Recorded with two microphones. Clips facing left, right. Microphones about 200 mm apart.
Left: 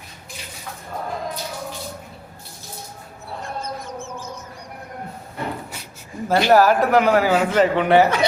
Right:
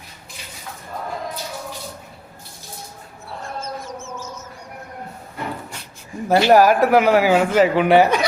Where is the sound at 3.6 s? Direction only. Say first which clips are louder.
Even; 15° left (ahead or behind).